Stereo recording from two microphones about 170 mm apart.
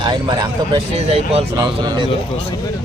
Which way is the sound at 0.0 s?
25° right (ahead or behind).